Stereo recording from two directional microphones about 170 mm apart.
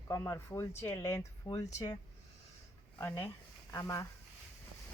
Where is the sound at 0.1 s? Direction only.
15° left (ahead or behind).